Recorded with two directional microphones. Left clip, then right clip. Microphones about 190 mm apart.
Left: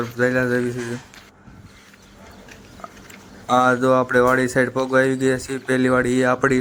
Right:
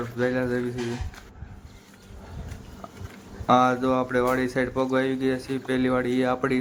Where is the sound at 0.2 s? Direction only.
20° left (ahead or behind).